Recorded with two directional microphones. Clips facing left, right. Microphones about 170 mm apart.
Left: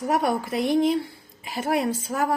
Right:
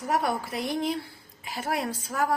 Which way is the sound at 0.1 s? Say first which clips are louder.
Left 3 dB; 20° left (ahead or behind).